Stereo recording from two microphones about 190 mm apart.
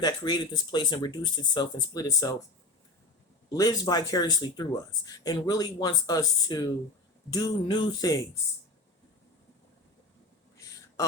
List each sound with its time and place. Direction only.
0.0 s speech: 20° left (ahead or behind)
3.5 s speech: 20° left (ahead or behind)